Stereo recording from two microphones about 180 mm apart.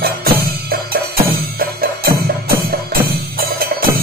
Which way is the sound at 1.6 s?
55° right (ahead or behind).